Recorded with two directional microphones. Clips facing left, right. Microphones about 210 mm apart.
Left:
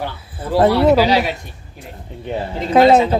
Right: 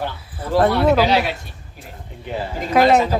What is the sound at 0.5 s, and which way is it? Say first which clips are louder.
Speech: left 3 dB; 15° left (ahead or behind).